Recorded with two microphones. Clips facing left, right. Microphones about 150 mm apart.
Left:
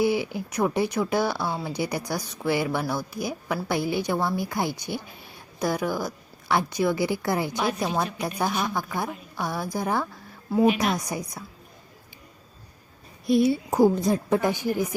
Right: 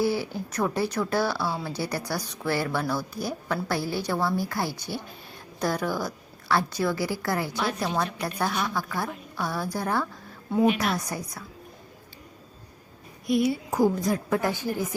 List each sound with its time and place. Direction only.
0.0 s speech: 15° left (ahead or behind)
10.5 s speech: 5° left (ahead or behind)
10.9 s speech: 15° left (ahead or behind)
13.2 s a woman's voice: 30° left (ahead or behind)